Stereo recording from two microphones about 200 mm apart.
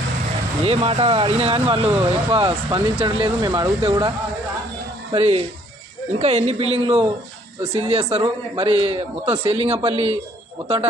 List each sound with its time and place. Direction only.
0.7 s speech: 30° right (ahead or behind)
5.1 s speech: 30° right (ahead or behind)